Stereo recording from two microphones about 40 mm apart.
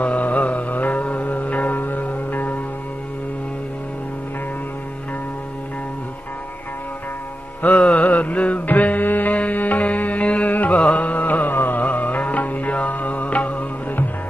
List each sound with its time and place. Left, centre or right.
0.0 s music: left
7.6 s music: left
8.0 s mantra: left
8.6 s music: left
10.5 s music: left